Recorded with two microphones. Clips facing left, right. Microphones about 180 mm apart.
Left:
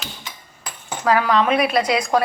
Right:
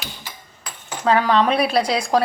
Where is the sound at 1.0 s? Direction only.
30° right (ahead or behind).